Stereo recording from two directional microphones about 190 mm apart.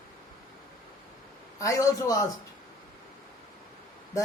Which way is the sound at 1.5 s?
15° left (ahead or behind).